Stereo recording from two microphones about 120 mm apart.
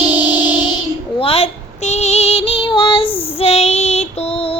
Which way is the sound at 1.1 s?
55° left (ahead or behind).